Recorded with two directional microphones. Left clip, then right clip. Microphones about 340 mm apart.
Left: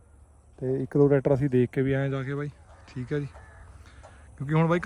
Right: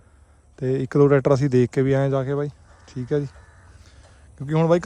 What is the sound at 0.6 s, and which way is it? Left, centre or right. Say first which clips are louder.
Speech: right 5 dB; left.